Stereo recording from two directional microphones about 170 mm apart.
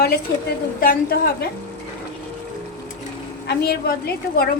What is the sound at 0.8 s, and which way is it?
Speech, 60° left (ahead or behind).